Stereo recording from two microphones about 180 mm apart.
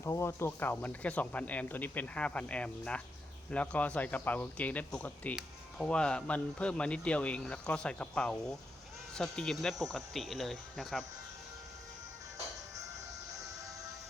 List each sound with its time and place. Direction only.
0.0 s speech: 15° left (ahead or behind)